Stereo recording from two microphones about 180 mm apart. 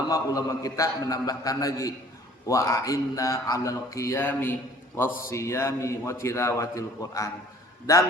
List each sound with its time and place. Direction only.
0.1 s a man's voice: 20° left (ahead or behind)
5.0 s a man's voice: 50° left (ahead or behind)
5.3 s speech: 15° left (ahead or behind)